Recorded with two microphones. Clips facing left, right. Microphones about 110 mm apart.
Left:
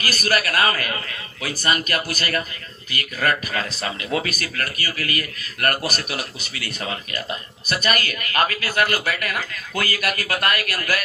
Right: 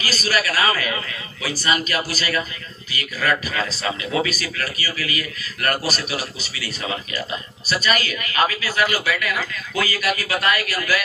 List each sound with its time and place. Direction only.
0.0 s a man's voice: 55° left (ahead or behind)